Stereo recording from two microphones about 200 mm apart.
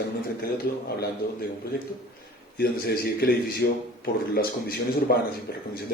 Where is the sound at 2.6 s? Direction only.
50° left (ahead or behind).